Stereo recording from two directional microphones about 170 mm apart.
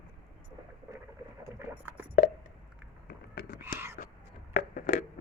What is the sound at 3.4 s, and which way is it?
Whispering, 70° left (ahead or behind).